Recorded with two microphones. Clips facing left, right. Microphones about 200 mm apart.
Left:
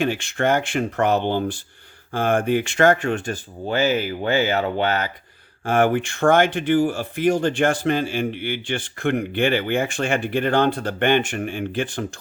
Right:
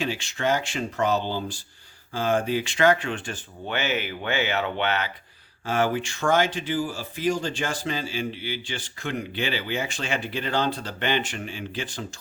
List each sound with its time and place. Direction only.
0.0 s speech: 55° left (ahead or behind)
5.6 s speech: 55° left (ahead or behind)